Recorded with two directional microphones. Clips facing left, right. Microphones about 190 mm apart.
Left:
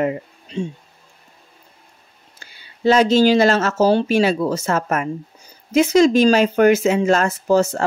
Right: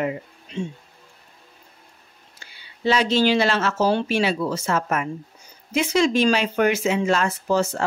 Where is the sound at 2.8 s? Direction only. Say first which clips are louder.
Left 6 dB; 45° left (ahead or behind).